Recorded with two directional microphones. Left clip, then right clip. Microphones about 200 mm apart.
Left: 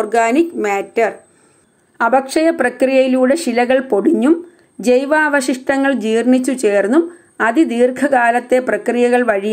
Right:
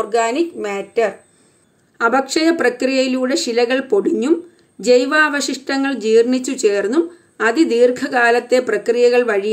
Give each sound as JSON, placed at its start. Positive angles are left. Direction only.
{"t": 0.0, "sound": "speech", "side_deg": 10}